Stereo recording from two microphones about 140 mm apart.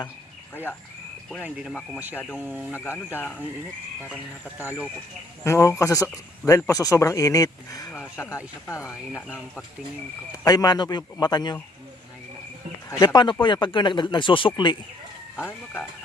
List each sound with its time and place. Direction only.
0.5 s speech: 15° left (ahead or behind)
2.3 s speech: 10° right (ahead or behind)
2.7 s speech: 15° left (ahead or behind)
5.4 s speech: 20° left (ahead or behind)
10.3 s speech: 25° left (ahead or behind)
12.9 s speech: 20° left (ahead or behind)
13.4 s speech: 35° left (ahead or behind)
15.4 s speech: 15° left (ahead or behind)